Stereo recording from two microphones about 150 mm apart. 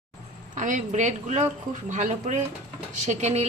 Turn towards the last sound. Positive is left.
turn(degrees=-45)  # may be behind; listen again after turning